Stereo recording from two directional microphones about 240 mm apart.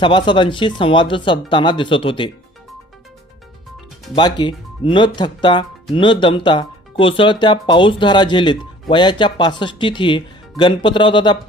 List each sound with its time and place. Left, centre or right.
0.0 s speech: centre
4.1 s speech: centre